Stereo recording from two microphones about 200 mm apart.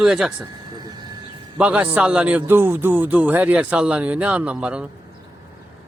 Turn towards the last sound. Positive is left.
turn(degrees=-5)  # may be behind; listen again after turning